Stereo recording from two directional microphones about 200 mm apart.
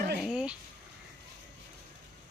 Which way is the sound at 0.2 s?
5° right (ahead or behind).